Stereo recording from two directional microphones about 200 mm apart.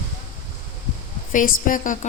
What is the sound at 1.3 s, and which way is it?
Speech, 40° left (ahead or behind).